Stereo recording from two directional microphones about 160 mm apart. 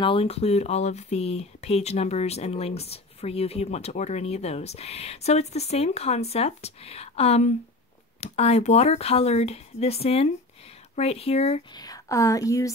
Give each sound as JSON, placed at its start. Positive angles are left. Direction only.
{"t": 0.0, "sound": "speech", "side_deg": 35}
{"t": 11.7, "sound": "a woman's voice", "side_deg": 25}